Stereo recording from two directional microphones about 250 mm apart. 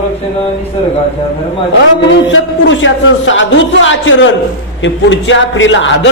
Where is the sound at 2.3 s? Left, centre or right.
Left.